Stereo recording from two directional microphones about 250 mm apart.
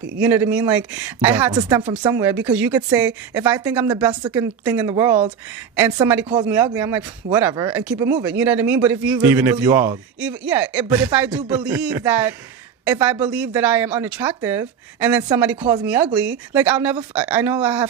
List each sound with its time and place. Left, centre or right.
0.2 s speech: centre